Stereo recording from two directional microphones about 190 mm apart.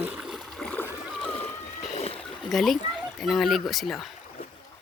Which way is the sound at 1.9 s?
30° left (ahead or behind).